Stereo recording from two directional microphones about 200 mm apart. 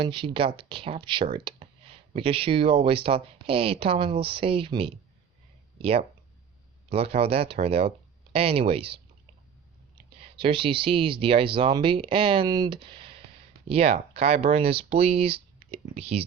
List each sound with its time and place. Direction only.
0.0 s speech: 25° right (ahead or behind)
10.2 s speech: 25° right (ahead or behind)